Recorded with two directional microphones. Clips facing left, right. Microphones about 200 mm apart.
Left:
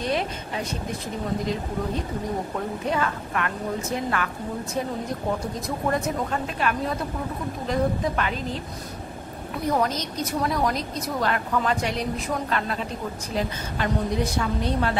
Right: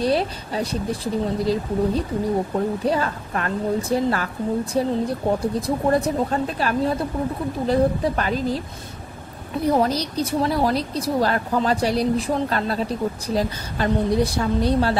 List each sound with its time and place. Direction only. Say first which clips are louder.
0.0 s a woman's voice: right 5 dB; 35° right (ahead or behind)
9.7 s a woman's voice: right 5 dB; 35° right (ahead or behind)